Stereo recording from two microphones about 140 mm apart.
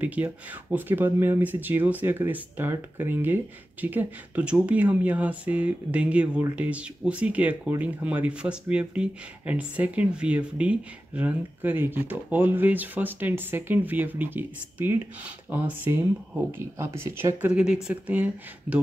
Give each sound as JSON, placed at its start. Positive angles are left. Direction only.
{"t": 0.0, "sound": "speech", "side_deg": -10}